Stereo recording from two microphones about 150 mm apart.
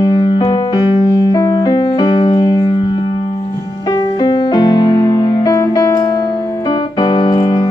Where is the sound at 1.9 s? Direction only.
30° left (ahead or behind).